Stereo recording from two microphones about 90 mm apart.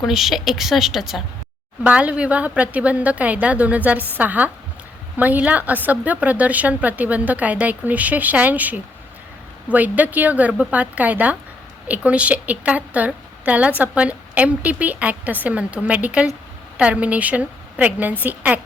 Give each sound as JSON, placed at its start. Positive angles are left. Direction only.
{"t": 0.0, "sound": "a woman's voice", "side_deg": -5}
{"t": 1.8, "sound": "a woman's voice", "side_deg": -15}